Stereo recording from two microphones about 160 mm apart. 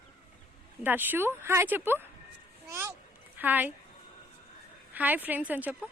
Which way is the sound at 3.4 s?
10° right (ahead or behind).